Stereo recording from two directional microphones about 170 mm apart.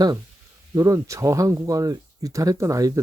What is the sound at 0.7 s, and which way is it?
Speech, 20° right (ahead or behind).